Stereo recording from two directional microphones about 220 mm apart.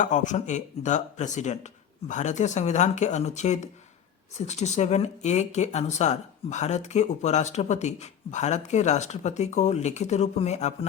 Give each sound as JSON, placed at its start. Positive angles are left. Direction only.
{"t": 0.0, "sound": "speech", "side_deg": 35}